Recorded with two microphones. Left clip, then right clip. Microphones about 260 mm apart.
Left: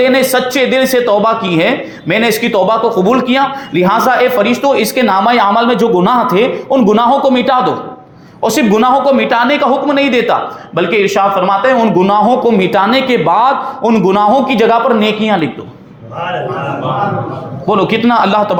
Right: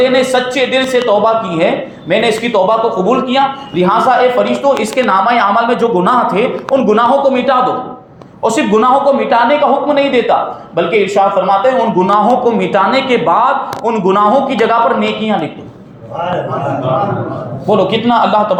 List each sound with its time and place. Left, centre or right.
0.0 s a man's voice: left
17.7 s a man's voice: left